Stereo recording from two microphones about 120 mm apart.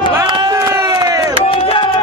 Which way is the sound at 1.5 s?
50° left (ahead or behind).